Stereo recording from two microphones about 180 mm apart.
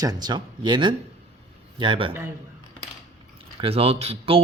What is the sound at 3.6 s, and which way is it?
Speech, 35° right (ahead or behind).